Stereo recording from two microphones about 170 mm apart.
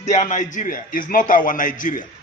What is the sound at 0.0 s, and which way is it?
Speech, 45° left (ahead or behind).